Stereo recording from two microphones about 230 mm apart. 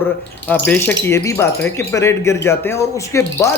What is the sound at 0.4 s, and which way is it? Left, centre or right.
Speech, centre.